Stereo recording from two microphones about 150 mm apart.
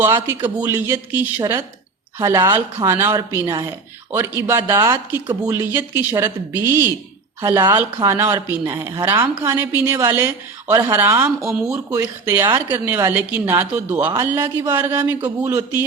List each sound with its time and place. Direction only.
0.0 s a woman's voice: 15° right (ahead or behind)
1.4 s speech: 25° right (ahead or behind)
2.1 s a woman's voice: 15° right (ahead or behind)
8.0 s a woman's voice: 15° right (ahead or behind)